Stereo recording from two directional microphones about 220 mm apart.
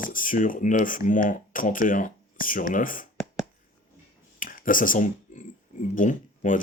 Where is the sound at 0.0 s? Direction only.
40° left (ahead or behind).